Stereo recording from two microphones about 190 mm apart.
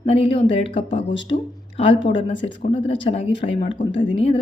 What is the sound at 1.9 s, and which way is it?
Speech, 75° left (ahead or behind).